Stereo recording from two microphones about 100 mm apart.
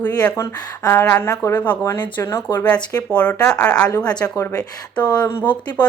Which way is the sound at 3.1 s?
10° left (ahead or behind).